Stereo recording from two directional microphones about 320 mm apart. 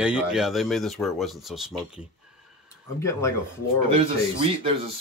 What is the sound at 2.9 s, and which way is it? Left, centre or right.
Speech, centre.